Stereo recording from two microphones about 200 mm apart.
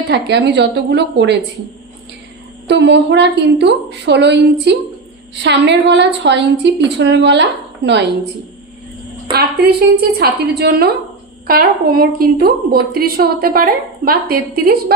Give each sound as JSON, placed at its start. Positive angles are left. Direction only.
{"t": 0.1, "sound": "a woman's voice", "side_deg": -60}
{"t": 2.8, "sound": "a woman's voice", "side_deg": -60}
{"t": 9.3, "sound": "a woman's voice", "side_deg": -50}